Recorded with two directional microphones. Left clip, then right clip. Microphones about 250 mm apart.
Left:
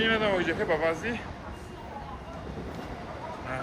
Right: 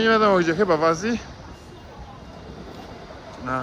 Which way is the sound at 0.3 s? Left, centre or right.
Right.